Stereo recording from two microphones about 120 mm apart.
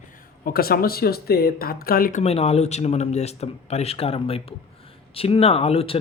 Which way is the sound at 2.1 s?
70° left (ahead or behind).